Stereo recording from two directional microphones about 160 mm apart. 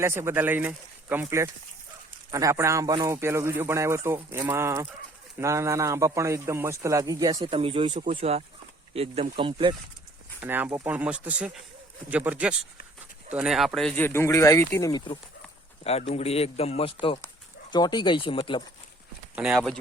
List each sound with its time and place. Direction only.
0.0 s a man's voice: 15° right (ahead or behind)
7.5 s speech: 35° right (ahead or behind)
10.4 s speech: 10° right (ahead or behind); by 15.0 s 20° left (ahead or behind)
15.8 s speech: 40° left (ahead or behind)
19.4 s speech: 5° right (ahead or behind)